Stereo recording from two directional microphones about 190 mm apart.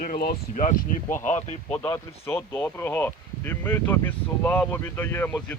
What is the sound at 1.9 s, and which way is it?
Speech, 15° left (ahead or behind).